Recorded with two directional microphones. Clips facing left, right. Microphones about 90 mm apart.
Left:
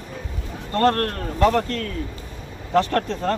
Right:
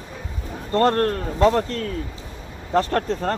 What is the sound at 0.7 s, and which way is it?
A man's voice, 25° right (ahead or behind).